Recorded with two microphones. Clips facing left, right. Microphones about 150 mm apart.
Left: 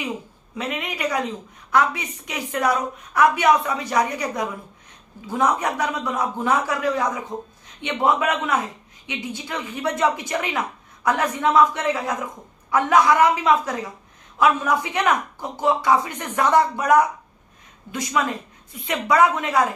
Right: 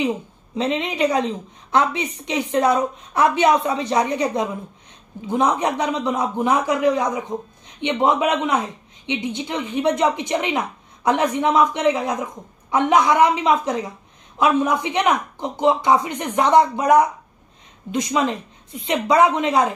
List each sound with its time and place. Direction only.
0.6 s a woman's voice: 25° right (ahead or behind)